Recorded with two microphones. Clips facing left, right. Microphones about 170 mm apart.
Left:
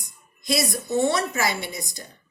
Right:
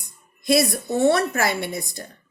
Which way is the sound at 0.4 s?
55° right (ahead or behind).